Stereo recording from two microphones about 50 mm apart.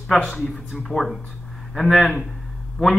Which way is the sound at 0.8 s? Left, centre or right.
Centre.